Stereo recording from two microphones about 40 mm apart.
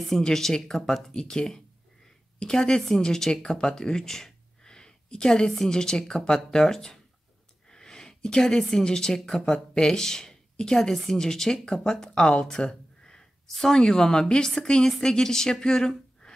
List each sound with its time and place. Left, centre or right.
0.3 s a woman's voice: centre
1.1 s a woman's voice: centre